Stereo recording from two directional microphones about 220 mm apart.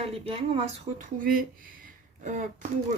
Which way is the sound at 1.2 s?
40° right (ahead or behind).